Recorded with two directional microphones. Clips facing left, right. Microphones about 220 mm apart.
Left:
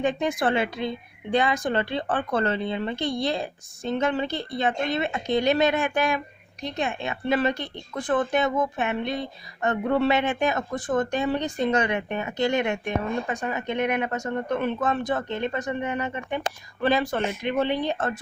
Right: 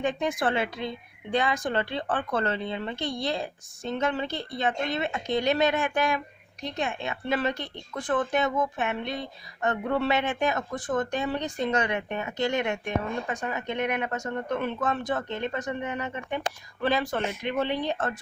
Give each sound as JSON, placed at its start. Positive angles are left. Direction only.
{"t": 0.0, "sound": "a woman's voice", "side_deg": 20}